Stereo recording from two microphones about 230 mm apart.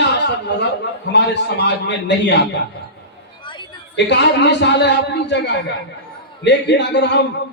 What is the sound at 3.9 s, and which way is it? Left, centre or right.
A man's voice, left.